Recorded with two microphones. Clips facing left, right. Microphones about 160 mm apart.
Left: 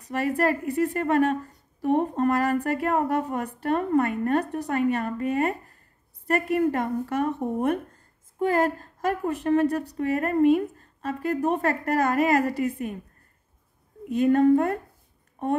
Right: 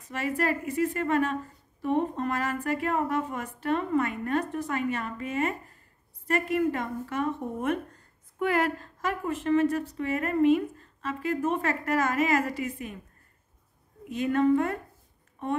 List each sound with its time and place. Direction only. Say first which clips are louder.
0.4 s a woman's voice: left 2 dB; 60° left (ahead or behind)
3.6 s a woman's voice: left 3 dB; 45° left (ahead or behind)
12.0 s a woman's voice: left 5 dB; 55° left (ahead or behind)
14.0 s a woman's voice: left 5 dB; 50° left (ahead or behind)